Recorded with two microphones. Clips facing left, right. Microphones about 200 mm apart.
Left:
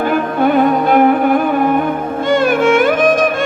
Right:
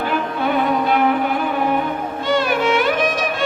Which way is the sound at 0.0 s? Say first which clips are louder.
Left 7 dB; 50° left (ahead or behind).